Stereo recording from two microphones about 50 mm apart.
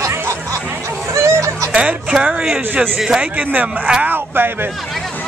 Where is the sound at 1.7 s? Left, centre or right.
Right.